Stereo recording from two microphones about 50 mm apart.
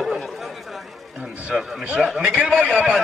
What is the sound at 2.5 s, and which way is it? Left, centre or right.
Speech, centre.